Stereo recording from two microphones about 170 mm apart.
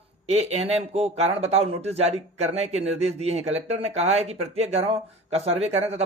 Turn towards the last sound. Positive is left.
turn(degrees=-40)  # may be behind; listen again after turning